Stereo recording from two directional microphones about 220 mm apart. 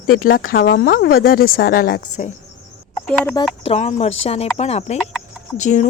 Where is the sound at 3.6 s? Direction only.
30° left (ahead or behind).